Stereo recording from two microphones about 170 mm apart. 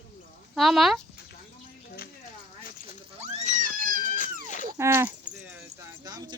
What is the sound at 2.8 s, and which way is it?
Cat, 40° right (ahead or behind).